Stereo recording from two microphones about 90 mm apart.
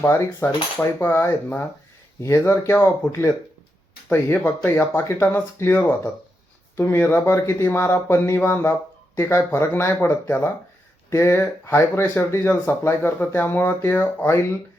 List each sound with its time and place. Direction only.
0.0 s speech: 25° left (ahead or behind)